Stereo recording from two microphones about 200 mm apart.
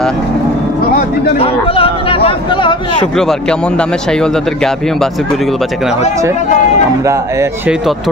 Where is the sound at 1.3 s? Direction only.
30° left (ahead or behind).